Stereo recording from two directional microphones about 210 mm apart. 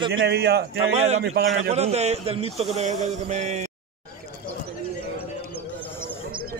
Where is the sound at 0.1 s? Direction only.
50° right (ahead or behind).